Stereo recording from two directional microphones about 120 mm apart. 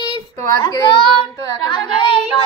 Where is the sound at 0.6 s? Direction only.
35° left (ahead or behind).